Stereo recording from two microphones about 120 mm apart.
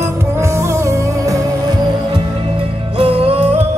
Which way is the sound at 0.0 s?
25° right (ahead or behind).